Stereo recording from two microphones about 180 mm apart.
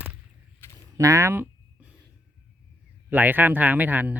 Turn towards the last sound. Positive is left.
turn(degrees=-10)  # may be behind; listen again after turning